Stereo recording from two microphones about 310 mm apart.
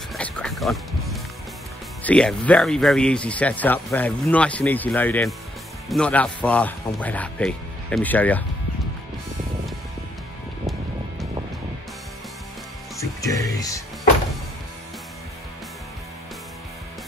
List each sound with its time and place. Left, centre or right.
0.1 s music: centre
2.0 s speech: centre
13.0 s speech: centre